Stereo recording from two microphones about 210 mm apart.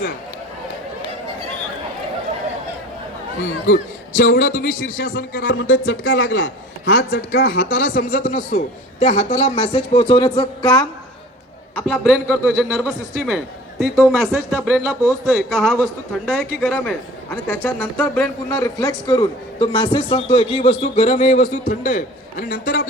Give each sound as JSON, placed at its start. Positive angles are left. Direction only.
{"t": 3.7, "sound": "a man's voice", "side_deg": 40}
{"t": 5.5, "sound": "a man's voice", "side_deg": 60}
{"t": 11.7, "sound": "a man's voice", "side_deg": 5}